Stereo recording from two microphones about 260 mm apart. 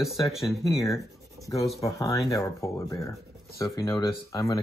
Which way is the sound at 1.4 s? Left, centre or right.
Right.